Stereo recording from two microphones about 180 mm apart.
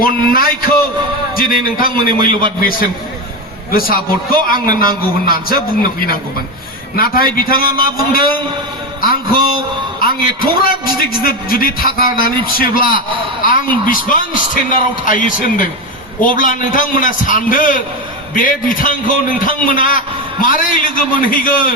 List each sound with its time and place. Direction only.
0.0 s a man's voice: 55° left (ahead or behind)
9.6 s a sound: 55° left (ahead or behind)
10.6 s a man's voice: 55° left (ahead or behind)